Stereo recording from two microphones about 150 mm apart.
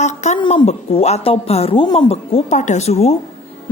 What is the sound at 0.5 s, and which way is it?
A woman's voice, 45° left (ahead or behind).